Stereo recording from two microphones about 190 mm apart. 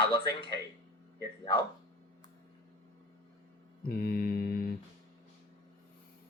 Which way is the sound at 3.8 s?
55° left (ahead or behind).